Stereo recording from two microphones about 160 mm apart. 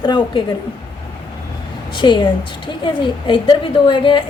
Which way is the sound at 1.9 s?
30° left (ahead or behind).